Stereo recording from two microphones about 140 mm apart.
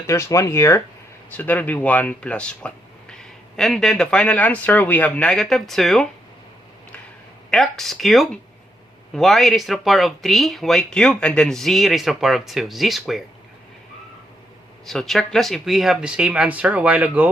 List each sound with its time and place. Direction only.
0.1 s speech: 20° left (ahead or behind); by 6.1 s centre (ahead or behind)
7.5 s speech: centre (ahead or behind)
14.8 s speech: centre (ahead or behind)